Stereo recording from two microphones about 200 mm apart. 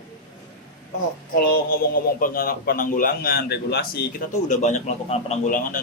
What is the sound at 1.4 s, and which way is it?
Speech, 50° left (ahead or behind).